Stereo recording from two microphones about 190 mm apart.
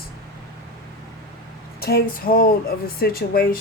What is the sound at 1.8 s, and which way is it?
Speech, 55° left (ahead or behind).